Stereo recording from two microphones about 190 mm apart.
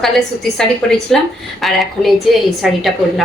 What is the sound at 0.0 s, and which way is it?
A woman's voice, centre (ahead or behind).